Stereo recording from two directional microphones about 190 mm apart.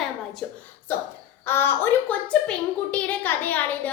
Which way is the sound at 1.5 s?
10° left (ahead or behind).